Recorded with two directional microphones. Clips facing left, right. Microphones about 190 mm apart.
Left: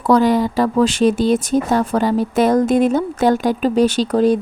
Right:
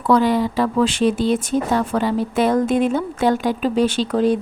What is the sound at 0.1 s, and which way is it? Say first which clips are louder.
Speech: left 2 dB; 40° left (ahead or behind).